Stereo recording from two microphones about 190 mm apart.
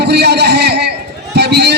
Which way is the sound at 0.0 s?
60° right (ahead or behind).